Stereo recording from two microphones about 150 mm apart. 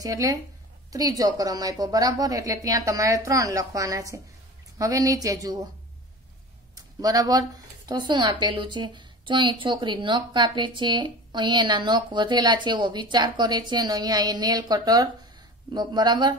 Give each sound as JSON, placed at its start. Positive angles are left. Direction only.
{"t": 0.0, "sound": "a woman's voice", "side_deg": -25}
{"t": 6.7, "sound": "a sound", "side_deg": -25}
{"t": 8.1, "sound": "a woman's voice", "side_deg": -30}